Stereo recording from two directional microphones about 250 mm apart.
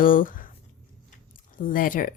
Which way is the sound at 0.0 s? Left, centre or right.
Left.